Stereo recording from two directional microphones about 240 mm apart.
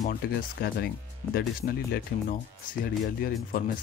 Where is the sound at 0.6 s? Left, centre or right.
Left.